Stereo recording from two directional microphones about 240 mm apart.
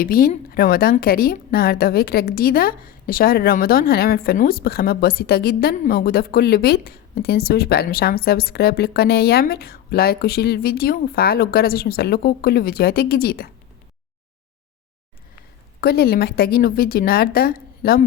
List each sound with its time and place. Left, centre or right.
0.0 s a woman's voice: left
15.8 s a woman's voice: left